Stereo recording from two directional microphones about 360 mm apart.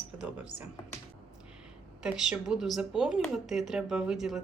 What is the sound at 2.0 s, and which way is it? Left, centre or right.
Speech, centre.